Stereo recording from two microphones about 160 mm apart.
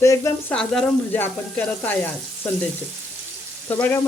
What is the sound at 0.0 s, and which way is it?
Speech, 20° left (ahead or behind).